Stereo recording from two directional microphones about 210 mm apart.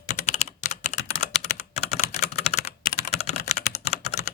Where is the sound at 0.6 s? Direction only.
35° left (ahead or behind).